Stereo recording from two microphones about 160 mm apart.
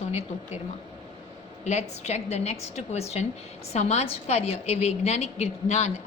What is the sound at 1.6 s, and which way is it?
A woman's voice, 45° left (ahead or behind).